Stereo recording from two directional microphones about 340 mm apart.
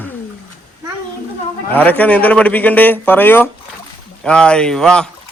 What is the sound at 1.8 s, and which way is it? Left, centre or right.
Speech, centre.